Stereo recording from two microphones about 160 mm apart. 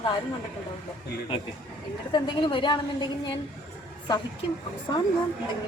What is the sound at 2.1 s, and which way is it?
A woman's voice, 30° left (ahead or behind).